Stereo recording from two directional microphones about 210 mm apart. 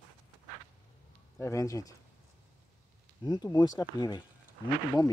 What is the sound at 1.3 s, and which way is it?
Speech, 15° left (ahead or behind).